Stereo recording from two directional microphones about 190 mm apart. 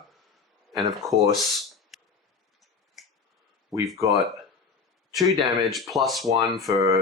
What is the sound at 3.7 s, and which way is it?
Speech, 15° right (ahead or behind).